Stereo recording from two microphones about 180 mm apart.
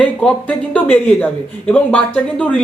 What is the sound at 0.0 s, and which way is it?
Speech, 5° left (ahead or behind).